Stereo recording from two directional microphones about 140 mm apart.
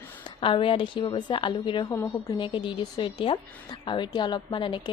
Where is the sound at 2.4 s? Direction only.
35° left (ahead or behind).